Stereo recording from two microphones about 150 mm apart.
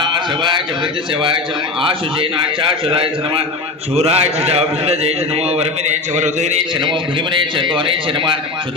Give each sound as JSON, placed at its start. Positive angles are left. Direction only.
{"t": 2.6, "sound": "a man's voice", "side_deg": -35}
{"t": 7.6, "sound": "a man's voice", "side_deg": -35}